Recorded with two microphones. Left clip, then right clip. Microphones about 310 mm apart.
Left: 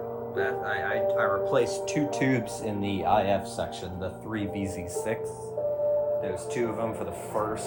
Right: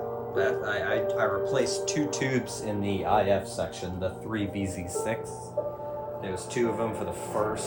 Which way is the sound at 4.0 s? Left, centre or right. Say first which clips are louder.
Right 3 dB; centre.